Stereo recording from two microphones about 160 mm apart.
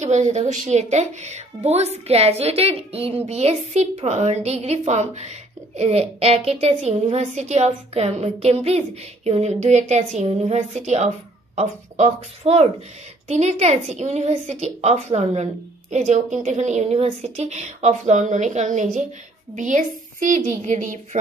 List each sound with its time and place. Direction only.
0.0 s a woman's voice: 45° right (ahead or behind)